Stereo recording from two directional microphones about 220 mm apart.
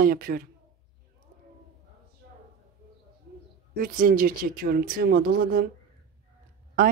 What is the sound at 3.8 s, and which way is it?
Speech, 40° right (ahead or behind).